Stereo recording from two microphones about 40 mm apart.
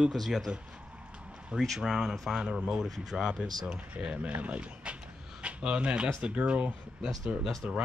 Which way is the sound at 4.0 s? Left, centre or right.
Right.